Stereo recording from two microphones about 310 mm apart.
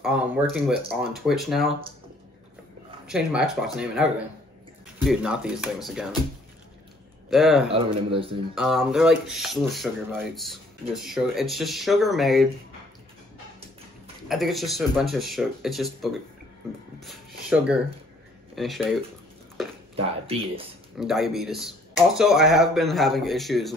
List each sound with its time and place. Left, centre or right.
0.0 s speech: centre
3.1 s speech: centre
7.2 s speech: centre
7.7 s speech: centre
8.5 s speech: centre
14.3 s speech: centre
20.0 s speech: centre
21.0 s speech: centre